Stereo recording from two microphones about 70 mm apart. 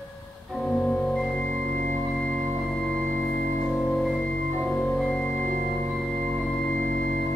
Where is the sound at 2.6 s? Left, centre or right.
Centre.